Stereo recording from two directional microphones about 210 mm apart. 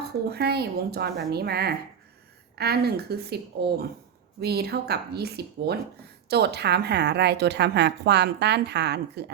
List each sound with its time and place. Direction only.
0.3 s speech: 50° right (ahead or behind)